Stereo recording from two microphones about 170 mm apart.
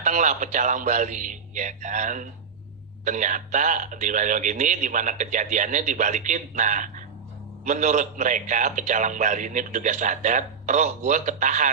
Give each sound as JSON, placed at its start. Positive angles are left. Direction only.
{"t": 0.0, "sound": "a man's voice", "side_deg": -45}